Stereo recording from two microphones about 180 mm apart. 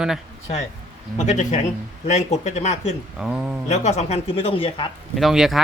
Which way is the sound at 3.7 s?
40° left (ahead or behind).